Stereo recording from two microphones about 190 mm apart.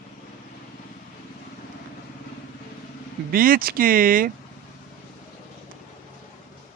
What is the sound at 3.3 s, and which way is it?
Speech, 50° right (ahead or behind).